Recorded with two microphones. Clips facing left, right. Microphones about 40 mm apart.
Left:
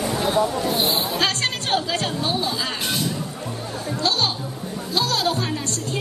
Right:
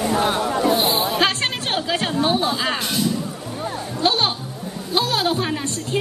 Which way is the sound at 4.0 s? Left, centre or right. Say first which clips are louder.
Right 3 dB; right.